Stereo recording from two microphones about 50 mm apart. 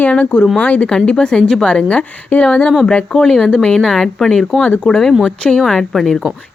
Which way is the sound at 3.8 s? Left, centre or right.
Centre.